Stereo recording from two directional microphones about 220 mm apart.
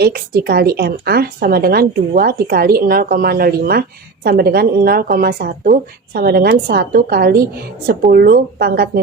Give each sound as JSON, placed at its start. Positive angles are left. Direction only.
{"t": 0.0, "sound": "a woman's voice", "side_deg": -45}